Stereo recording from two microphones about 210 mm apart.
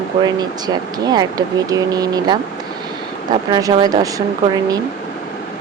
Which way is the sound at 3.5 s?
20° right (ahead or behind).